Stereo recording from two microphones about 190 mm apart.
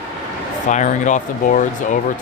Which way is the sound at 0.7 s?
40° left (ahead or behind).